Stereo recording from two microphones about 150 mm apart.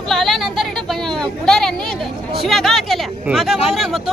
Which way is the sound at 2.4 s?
Centre (ahead or behind).